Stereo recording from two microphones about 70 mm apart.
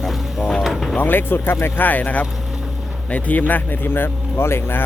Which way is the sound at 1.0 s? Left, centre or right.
Left.